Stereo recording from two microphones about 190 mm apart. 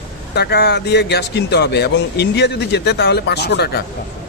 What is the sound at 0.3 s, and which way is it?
Speech, 60° left (ahead or behind).